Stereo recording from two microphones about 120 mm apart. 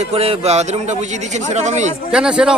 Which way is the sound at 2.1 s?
5° right (ahead or behind).